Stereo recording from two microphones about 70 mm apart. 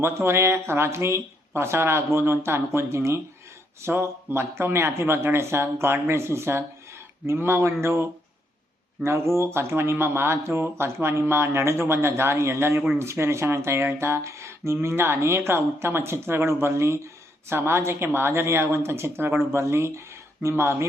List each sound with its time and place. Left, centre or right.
0.0 s speech: right